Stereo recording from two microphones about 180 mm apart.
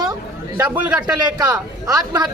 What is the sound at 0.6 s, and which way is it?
Speech, 10° right (ahead or behind).